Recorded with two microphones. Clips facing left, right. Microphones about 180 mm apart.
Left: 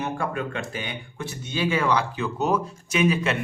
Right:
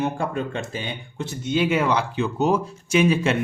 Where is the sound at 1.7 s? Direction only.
25° right (ahead or behind).